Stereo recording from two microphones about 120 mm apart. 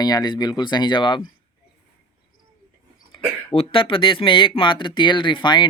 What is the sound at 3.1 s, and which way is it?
Speech, 50° left (ahead or behind).